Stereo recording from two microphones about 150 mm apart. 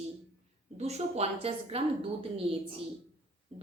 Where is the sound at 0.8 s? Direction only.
45° right (ahead or behind).